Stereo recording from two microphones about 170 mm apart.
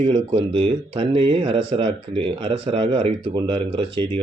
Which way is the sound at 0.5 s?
30° right (ahead or behind).